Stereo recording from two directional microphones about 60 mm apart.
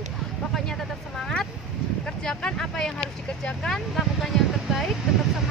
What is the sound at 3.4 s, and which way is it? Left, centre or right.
Speech, centre.